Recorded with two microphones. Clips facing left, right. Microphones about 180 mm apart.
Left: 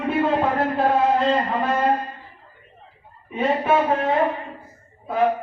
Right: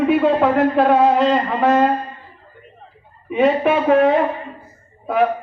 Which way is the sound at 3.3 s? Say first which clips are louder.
Right 4 dB; 75° right (ahead or behind).